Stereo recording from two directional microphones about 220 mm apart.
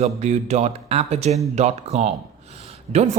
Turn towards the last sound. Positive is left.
turn(degrees=-30)  # may be behind; listen again after turning